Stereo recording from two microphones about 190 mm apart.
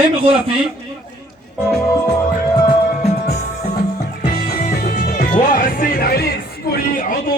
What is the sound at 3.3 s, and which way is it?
Music, 35° left (ahead or behind).